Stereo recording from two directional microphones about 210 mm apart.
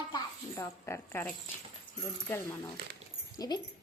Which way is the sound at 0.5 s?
15° left (ahead or behind).